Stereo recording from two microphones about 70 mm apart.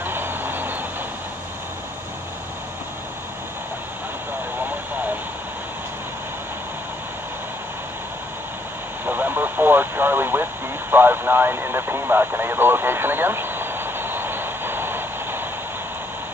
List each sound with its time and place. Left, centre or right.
0.0 s vehicle: right
9.0 s vehicle: right